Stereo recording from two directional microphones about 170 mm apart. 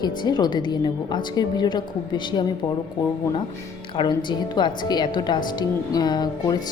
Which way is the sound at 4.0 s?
25° left (ahead or behind).